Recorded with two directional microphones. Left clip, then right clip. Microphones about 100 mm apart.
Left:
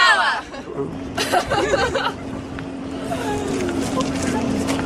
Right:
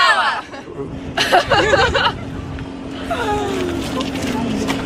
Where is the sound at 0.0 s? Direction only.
5° left (ahead or behind).